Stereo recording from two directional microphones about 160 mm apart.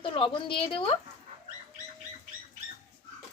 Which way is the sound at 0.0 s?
35° left (ahead or behind).